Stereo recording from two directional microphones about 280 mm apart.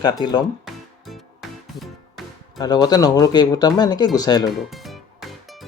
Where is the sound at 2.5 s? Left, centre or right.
Centre.